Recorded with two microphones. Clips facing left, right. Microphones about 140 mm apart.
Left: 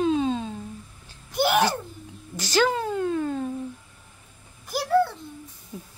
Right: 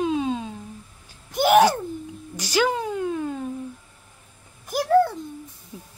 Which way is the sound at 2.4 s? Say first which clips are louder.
Even; 10° right (ahead or behind).